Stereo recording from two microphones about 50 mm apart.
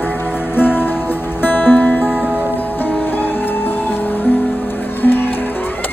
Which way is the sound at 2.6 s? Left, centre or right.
Left.